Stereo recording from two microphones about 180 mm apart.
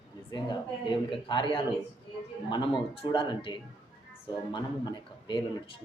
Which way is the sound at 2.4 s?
25° left (ahead or behind).